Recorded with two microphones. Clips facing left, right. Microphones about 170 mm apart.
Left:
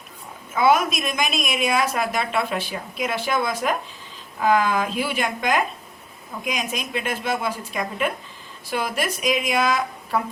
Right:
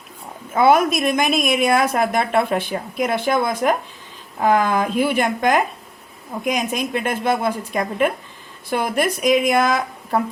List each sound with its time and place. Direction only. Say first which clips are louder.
0.5 s a woman's voice: right 4 dB; 55° right (ahead or behind)